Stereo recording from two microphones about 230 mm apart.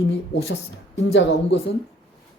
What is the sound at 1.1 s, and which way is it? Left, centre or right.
Speech, left.